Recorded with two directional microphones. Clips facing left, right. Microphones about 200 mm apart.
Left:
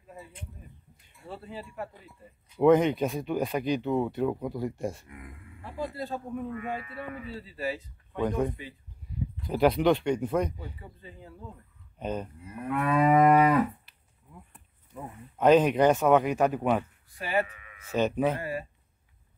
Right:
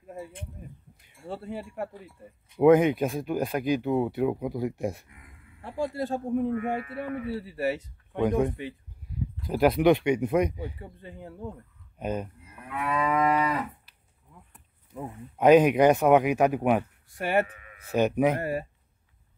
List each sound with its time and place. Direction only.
1.2 s a man's voice: 60° right (ahead or behind)
2.6 s speech: 10° right (ahead or behind)
5.0 s speech: 55° left (ahead or behind)
5.6 s speech: 80° right
6.4 s a man's voice: 55° right (ahead or behind)
8.2 s speech: 10° right (ahead or behind)
9.5 s speech: 5° right (ahead or behind)
10.6 s a man's voice: 65° right (ahead or behind)
12.0 s speech: 10° right (ahead or behind)
12.6 s moo: 50° left (ahead or behind)
15.0 s speech: 10° right (ahead or behind)
17.6 s sheep: 40° right (ahead or behind)
17.8 s speech: 15° right (ahead or behind)
18.4 s speech: 55° right (ahead or behind)